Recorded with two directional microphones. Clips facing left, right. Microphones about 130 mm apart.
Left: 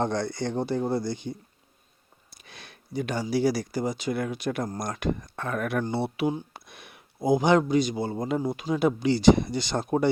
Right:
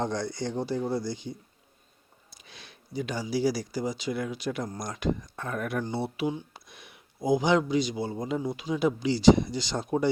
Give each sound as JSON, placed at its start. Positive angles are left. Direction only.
{"t": 0.0, "sound": "speech", "side_deg": 60}
{"t": 2.3, "sound": "speech", "side_deg": 55}
{"t": 5.8, "sound": "a man's voice", "side_deg": 65}